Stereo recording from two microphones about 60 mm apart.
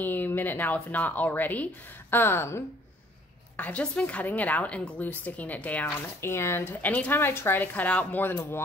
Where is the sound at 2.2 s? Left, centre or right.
Left.